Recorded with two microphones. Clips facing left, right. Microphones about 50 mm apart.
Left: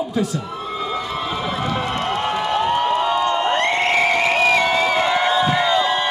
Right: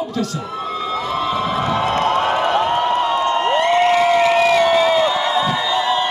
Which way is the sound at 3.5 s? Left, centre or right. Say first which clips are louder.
Right 4 dB; left.